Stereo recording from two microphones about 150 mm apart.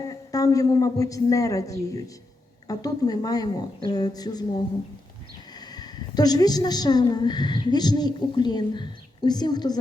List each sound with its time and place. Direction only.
0.1 s a woman's voice: 25° left (ahead or behind)